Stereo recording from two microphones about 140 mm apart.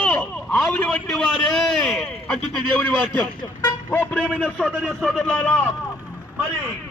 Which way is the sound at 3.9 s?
15° left (ahead or behind).